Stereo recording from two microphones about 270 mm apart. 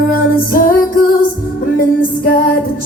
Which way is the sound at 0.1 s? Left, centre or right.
Left.